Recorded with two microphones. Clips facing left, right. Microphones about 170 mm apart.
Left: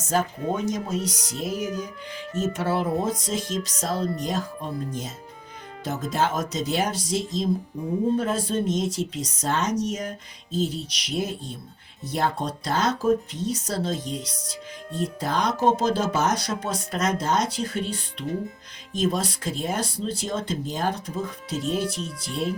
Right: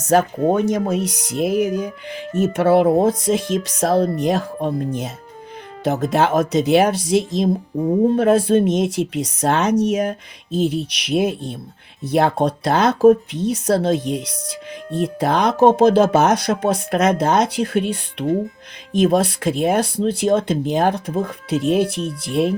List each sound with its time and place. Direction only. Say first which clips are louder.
0.0 s speech: right 9 dB; 70° right (ahead or behind)